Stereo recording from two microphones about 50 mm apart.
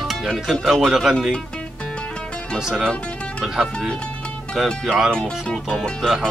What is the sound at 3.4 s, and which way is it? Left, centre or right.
Speech, centre.